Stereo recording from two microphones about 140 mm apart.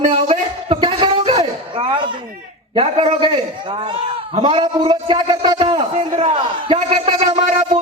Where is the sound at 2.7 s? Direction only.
45° right (ahead or behind).